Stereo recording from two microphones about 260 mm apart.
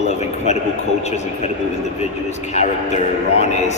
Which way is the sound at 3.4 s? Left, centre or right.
Left.